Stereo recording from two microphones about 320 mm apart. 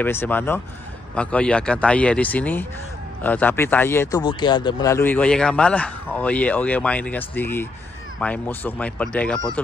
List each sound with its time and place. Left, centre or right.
0.0 s speech: centre